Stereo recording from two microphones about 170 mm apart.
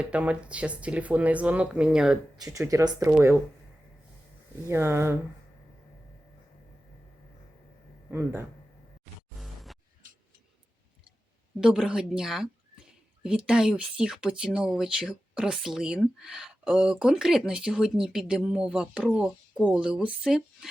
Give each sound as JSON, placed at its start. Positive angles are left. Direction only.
{"t": 0.0, "sound": "speech", "side_deg": -5}
{"t": 2.4, "sound": "speech", "side_deg": -20}
{"t": 3.1, "sound": "speech", "side_deg": -5}
{"t": 4.6, "sound": "speech", "side_deg": -15}
{"t": 8.1, "sound": "speech", "side_deg": -15}
{"t": 9.4, "sound": "music", "side_deg": 0}
{"t": 11.6, "sound": "speech", "side_deg": -5}